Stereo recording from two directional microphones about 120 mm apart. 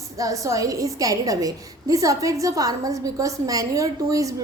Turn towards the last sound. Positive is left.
turn(degrees=-25)  # may be behind; listen again after turning